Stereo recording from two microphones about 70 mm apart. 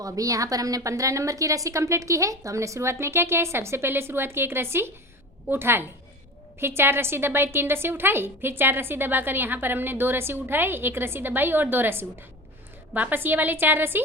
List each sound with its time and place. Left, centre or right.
0.0 s a woman's voice: right